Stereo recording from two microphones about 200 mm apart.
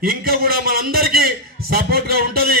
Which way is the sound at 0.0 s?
50° right (ahead or behind).